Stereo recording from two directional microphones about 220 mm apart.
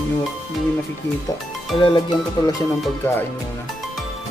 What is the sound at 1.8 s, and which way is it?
Speech, 20° left (ahead or behind).